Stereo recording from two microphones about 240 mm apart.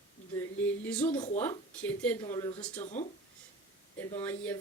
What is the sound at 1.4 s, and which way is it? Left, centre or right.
Speech, centre.